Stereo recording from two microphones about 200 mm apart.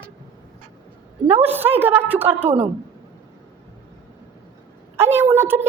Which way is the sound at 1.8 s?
10° right (ahead or behind).